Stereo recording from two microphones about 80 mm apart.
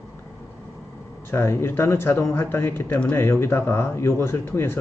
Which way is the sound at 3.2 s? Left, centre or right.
Left.